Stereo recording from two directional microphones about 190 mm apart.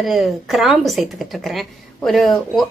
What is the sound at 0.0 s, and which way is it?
Speech, centre (ahead or behind).